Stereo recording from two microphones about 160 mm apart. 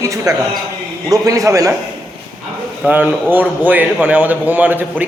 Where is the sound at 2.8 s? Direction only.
10° right (ahead or behind).